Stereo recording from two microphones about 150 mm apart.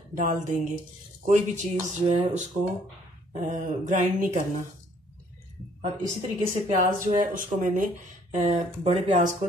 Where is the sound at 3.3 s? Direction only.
55° right (ahead or behind).